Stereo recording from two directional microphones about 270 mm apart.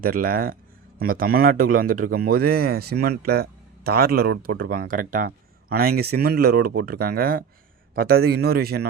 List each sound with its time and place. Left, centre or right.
0.0 s a man's voice: right